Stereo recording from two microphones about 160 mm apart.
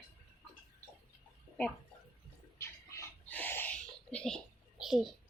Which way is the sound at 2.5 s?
20° left (ahead or behind).